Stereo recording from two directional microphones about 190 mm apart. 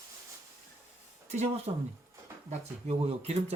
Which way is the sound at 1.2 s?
35° right (ahead or behind).